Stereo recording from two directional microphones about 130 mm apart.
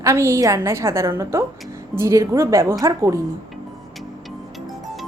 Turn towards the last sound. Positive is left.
turn(degrees=-25)  # may be behind; listen again after turning